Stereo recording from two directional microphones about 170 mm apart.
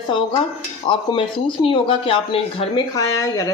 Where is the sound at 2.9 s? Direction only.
20° left (ahead or behind).